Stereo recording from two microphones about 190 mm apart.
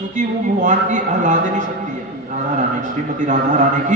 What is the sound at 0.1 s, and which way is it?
A man's voice, 40° right (ahead or behind).